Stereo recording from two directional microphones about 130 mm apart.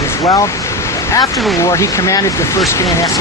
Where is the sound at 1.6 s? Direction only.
25° left (ahead or behind).